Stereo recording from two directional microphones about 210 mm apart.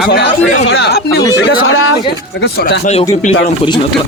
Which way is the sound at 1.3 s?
65° left (ahead or behind).